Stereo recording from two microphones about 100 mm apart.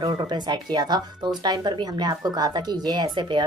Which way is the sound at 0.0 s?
50° right (ahead or behind).